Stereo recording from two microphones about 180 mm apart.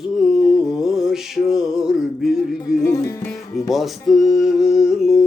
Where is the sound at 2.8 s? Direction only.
15° left (ahead or behind).